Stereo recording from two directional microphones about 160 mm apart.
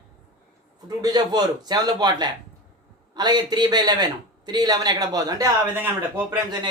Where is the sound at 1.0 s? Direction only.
25° right (ahead or behind).